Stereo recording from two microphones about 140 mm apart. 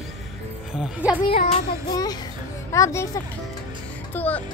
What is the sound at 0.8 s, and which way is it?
Speech, 10° right (ahead or behind).